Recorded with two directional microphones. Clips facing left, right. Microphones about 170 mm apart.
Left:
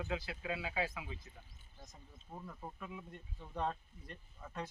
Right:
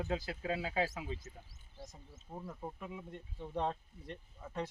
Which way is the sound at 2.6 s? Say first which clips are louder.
Right 3 dB; 15° right (ahead or behind).